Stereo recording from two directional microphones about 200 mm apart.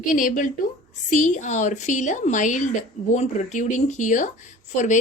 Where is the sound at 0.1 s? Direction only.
40° left (ahead or behind).